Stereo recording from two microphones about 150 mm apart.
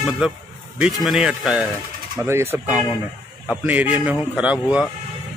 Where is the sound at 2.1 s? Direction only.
20° right (ahead or behind).